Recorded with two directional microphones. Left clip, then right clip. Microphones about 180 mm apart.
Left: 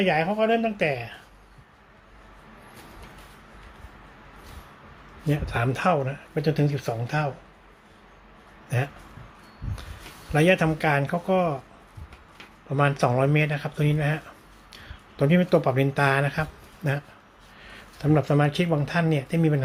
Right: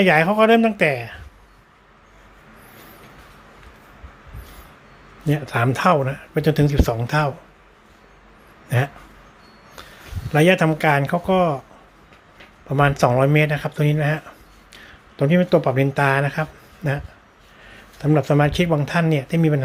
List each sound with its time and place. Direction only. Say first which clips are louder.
0.0 s speech: right 8 dB; 30° right (ahead or behind)
5.2 s speech: right 6 dB; 20° right (ahead or behind)
8.7 s speech: right 6 dB; 25° right (ahead or behind)
10.3 s speech: right 5 dB; 20° right (ahead or behind)
12.6 s speech: right 6 dB; 15° right (ahead or behind)